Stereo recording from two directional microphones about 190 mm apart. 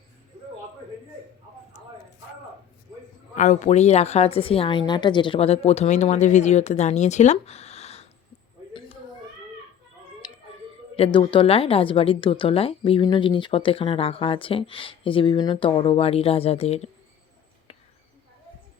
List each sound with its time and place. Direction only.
3.3 s speech: 40° left (ahead or behind)
10.9 s a woman's voice: 30° left (ahead or behind)